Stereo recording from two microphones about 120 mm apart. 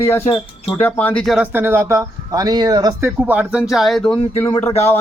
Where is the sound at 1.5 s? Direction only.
20° right (ahead or behind); by 2.9 s 35° right (ahead or behind).